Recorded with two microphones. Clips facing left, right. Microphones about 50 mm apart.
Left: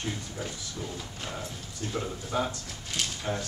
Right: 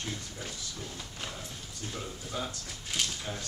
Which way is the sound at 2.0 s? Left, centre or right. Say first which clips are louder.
Left 7 dB; left.